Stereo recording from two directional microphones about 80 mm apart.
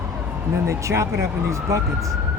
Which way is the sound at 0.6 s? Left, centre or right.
Right.